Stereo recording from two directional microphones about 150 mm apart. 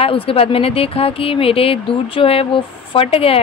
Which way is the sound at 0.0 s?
40° left (ahead or behind).